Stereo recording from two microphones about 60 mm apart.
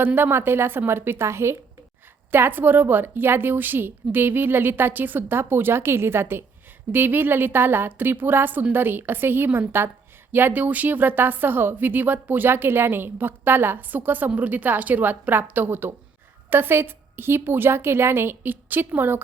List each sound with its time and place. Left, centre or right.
0.0 s a woman's voice: right
2.3 s a woman's voice: right